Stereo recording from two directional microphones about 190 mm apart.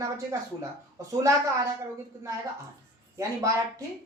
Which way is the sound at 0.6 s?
15° right (ahead or behind).